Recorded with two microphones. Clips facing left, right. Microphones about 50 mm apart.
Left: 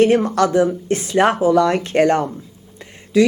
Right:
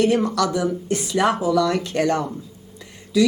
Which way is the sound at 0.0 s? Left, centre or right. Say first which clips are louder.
Left 5 dB; left.